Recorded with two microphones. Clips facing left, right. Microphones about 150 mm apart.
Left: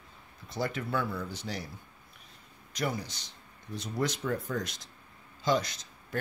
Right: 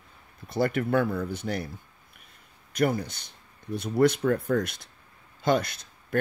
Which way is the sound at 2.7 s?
55° right (ahead or behind).